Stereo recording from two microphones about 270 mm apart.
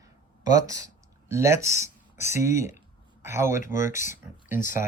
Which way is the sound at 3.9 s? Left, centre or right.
Left.